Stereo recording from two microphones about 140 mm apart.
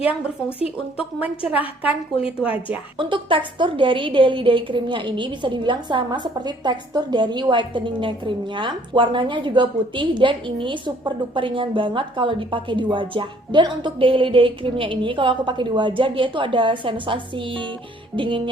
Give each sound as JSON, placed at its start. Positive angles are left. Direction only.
{"t": 0.9, "sound": "a woman's voice", "side_deg": -5}
{"t": 3.0, "sound": "a woman's voice", "side_deg": -35}